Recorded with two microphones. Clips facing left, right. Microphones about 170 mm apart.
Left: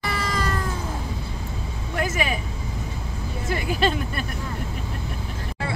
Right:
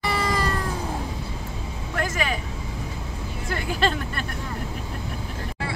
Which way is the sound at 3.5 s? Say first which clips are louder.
Left 2 dB; 10° left (ahead or behind).